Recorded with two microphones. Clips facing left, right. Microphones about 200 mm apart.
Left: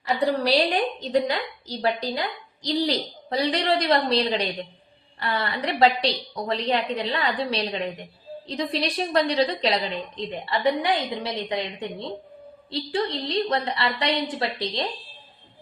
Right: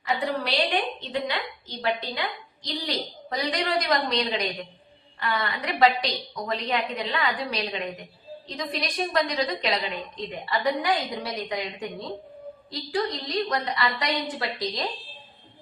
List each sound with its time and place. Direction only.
0.3 s a woman's voice: 40° left (ahead or behind)